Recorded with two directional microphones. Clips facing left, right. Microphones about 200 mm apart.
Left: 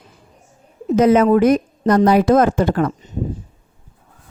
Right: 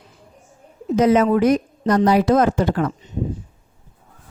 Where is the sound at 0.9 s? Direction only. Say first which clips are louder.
Left 3 dB; 55° left (ahead or behind).